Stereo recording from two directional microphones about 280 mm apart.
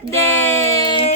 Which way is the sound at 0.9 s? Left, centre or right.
Centre.